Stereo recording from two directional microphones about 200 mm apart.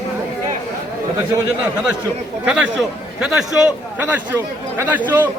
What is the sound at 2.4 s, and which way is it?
A man's voice, 5° right (ahead or behind).